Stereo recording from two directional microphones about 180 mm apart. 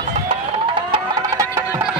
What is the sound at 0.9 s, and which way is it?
Music, 20° right (ahead or behind).